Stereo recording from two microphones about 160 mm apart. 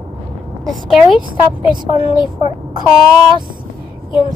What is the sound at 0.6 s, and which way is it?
Speech, centre (ahead or behind).